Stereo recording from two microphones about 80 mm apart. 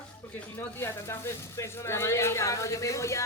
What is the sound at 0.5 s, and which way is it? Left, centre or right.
Speech, left.